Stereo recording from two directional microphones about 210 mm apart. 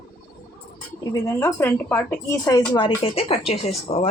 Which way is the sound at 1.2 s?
15° left (ahead or behind).